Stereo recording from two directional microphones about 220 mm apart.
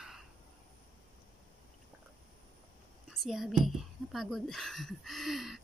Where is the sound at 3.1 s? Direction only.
Centre (ahead or behind).